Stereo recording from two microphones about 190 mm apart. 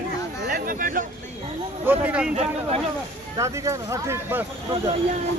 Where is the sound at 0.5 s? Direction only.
45° right (ahead or behind).